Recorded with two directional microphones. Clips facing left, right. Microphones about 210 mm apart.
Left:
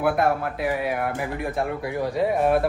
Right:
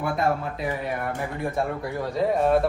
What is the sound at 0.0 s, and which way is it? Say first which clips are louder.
Speech: left 3 dB; 70° left (ahead or behind).